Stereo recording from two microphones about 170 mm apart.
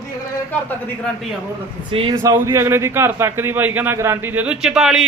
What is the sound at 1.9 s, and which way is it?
Speech, 30° right (ahead or behind).